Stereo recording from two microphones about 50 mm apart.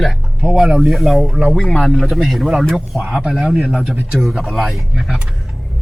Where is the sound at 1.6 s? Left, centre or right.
Centre.